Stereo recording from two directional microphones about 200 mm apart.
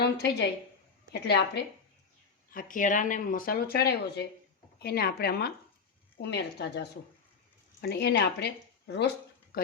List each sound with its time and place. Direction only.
0.0 s a woman's voice: 55° left (ahead or behind)
2.5 s a woman's voice: 45° left (ahead or behind)